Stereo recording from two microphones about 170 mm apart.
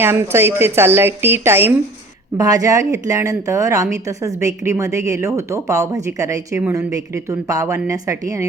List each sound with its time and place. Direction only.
0.0 s a woman's voice: 15° right (ahead or behind)